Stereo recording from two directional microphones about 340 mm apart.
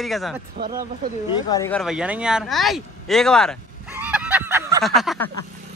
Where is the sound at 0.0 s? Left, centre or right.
Centre.